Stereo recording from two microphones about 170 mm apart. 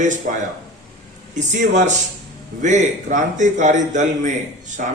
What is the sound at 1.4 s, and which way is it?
A man's voice, 45° right (ahead or behind).